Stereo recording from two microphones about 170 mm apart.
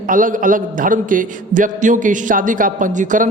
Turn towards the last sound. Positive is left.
turn(degrees=-50)  # may be behind; listen again after turning